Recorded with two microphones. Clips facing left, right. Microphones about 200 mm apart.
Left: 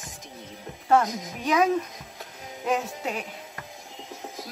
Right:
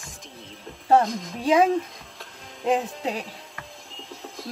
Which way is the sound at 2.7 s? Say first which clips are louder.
Right 3 dB; 30° right (ahead or behind).